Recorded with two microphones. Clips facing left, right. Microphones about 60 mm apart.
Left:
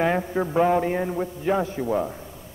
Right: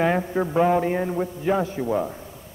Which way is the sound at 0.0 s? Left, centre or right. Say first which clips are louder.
Right 1 dB; centre.